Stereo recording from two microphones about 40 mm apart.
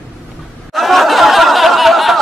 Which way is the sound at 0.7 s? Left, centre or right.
Centre.